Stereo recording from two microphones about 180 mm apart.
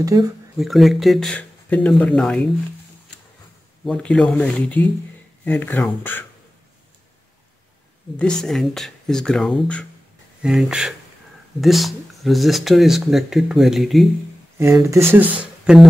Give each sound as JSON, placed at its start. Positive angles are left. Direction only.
{"t": 0.0, "sound": "speech", "side_deg": -20}
{"t": 0.6, "sound": "speech", "side_deg": 0}
{"t": 3.8, "sound": "speech", "side_deg": 5}
{"t": 8.2, "sound": "speech", "side_deg": 5}
{"t": 14.6, "sound": "speech", "side_deg": -15}